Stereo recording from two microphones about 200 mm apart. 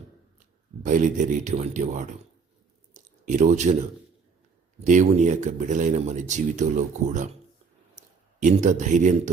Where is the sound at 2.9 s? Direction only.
40° right (ahead or behind).